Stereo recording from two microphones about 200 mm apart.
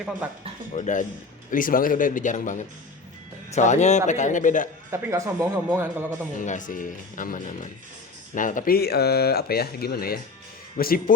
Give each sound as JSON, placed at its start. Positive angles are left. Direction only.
{"t": 0.7, "sound": "speech", "side_deg": 35}
{"t": 4.9, "sound": "speech", "side_deg": -15}
{"t": 6.3, "sound": "speech", "side_deg": 40}